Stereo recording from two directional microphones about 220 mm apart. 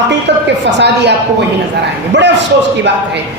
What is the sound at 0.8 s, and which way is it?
Speech, 50° right (ahead or behind).